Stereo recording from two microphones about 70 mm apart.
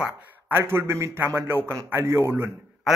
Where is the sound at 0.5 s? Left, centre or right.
Right.